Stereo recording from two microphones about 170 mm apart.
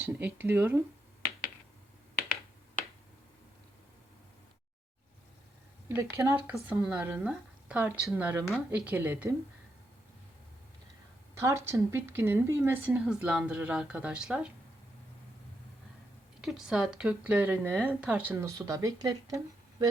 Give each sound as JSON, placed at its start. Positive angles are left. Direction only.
{"t": 0.0, "sound": "a woman's voice", "side_deg": -10}
{"t": 5.9, "sound": "a woman's voice", "side_deg": -15}
{"t": 11.3, "sound": "a woman's voice", "side_deg": -15}
{"t": 16.4, "sound": "a woman's voice", "side_deg": -5}